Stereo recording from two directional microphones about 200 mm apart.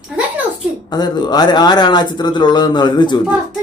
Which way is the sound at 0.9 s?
20° left (ahead or behind).